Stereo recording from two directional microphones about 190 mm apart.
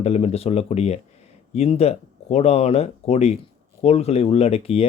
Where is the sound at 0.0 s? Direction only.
30° left (ahead or behind).